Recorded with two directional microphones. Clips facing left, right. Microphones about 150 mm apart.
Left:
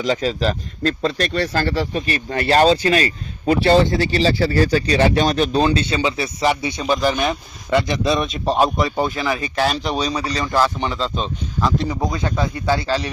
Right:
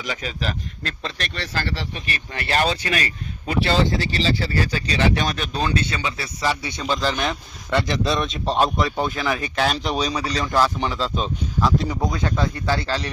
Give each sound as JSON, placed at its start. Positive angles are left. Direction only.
{"t": 0.0, "sound": "a man's voice", "side_deg": 35}